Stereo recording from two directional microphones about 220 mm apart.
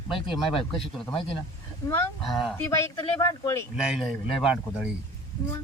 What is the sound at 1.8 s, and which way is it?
Speech, 15° left (ahead or behind).